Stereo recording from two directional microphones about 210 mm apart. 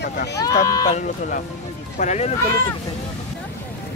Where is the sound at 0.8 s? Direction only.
35° left (ahead or behind).